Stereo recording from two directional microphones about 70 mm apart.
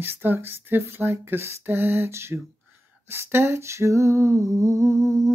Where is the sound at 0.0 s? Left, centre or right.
Right.